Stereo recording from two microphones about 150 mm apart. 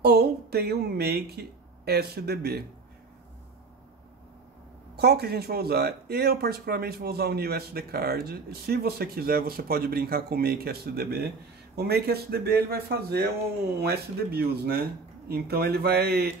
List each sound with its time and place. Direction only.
0.0 s speech: 90° right
4.9 s speech: 90° right